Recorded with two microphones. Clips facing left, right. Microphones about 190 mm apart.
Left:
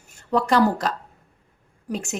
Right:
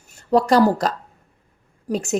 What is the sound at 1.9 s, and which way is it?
Speech, 35° right (ahead or behind).